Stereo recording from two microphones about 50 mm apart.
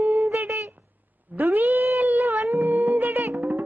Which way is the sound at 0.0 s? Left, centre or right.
Right.